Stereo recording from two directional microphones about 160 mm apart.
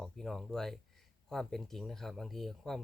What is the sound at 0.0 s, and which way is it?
Speech, centre (ahead or behind).